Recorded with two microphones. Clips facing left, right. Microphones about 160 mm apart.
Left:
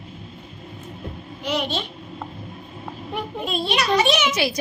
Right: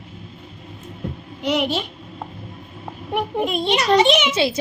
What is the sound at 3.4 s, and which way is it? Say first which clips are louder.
A child's voice: right 1 dB; 20° right (ahead or behind).